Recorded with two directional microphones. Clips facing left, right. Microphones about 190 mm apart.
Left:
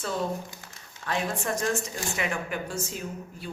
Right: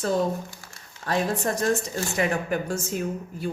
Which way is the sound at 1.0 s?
40° right (ahead or behind).